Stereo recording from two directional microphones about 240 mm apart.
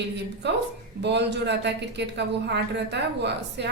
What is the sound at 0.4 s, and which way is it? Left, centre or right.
Speech, right.